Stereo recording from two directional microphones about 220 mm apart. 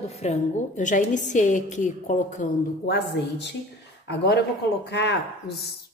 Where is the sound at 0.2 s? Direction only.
35° left (ahead or behind).